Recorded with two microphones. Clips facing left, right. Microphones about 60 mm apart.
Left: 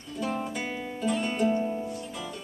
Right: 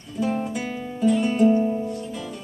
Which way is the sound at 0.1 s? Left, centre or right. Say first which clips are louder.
Right 6 dB; centre.